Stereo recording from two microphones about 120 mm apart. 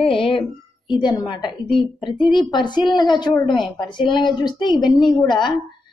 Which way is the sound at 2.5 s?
40° left (ahead or behind).